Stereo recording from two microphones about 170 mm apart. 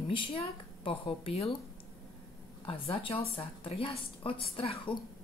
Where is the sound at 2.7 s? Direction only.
30° left (ahead or behind).